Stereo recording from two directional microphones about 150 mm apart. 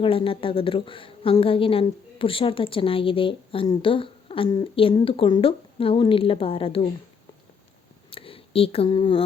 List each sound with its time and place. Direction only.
0.0 s a woman's voice: 35° left (ahead or behind)
8.1 s speech: 35° left (ahead or behind)